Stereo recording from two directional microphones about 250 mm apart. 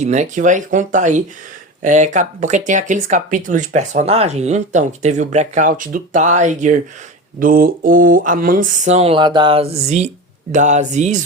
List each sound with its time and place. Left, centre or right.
0.0 s speech: right